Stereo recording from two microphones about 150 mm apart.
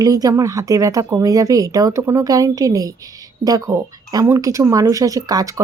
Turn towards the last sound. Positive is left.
turn(degrees=-25)  # may be behind; listen again after turning